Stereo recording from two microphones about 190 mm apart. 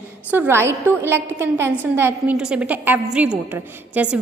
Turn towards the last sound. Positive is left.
turn(degrees=-5)  # may be behind; listen again after turning